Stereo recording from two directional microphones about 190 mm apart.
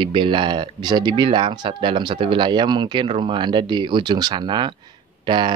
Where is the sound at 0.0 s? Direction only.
25° right (ahead or behind).